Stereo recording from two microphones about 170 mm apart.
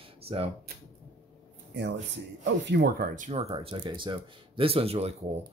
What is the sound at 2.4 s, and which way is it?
Speech, 90° right.